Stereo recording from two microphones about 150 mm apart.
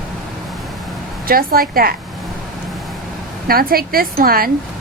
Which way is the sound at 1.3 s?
80° right.